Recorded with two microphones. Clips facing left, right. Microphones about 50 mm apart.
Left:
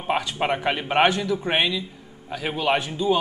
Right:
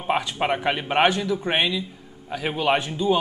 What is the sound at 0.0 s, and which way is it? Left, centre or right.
Speech, centre.